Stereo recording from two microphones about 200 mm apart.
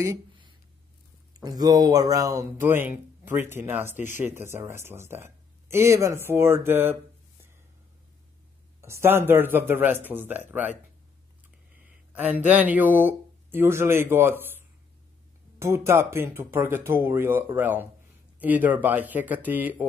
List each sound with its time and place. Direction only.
0.0 s a sound: 20° right (ahead or behind)
1.3 s a man's voice: 20° right (ahead or behind)
8.8 s a man's voice: 15° right (ahead or behind)
11.8 s speech: 10° right (ahead or behind)
15.6 s a man's voice: 15° right (ahead or behind)